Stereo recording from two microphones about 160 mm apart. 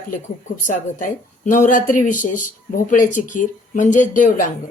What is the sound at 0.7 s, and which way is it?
Speech, 55° left (ahead or behind).